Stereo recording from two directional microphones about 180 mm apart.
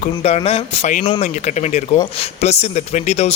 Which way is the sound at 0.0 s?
35° left (ahead or behind).